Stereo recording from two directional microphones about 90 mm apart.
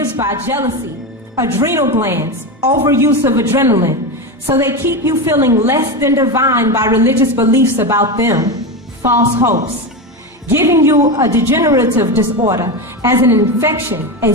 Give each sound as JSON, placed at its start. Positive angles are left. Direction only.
{"t": 0.0, "sound": "a woman's voice", "side_deg": -30}
{"t": 9.0, "sound": "a woman's voice", "side_deg": -30}